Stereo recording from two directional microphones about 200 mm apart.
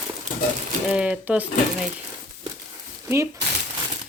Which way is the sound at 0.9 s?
5° right (ahead or behind).